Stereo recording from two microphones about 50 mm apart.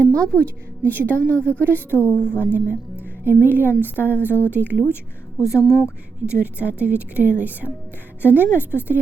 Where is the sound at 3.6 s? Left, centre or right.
Left.